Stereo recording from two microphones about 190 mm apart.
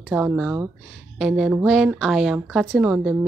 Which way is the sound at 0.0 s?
5° right (ahead or behind).